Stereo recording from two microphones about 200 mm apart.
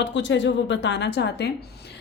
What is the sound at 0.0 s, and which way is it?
A woman's voice, 65° left (ahead or behind).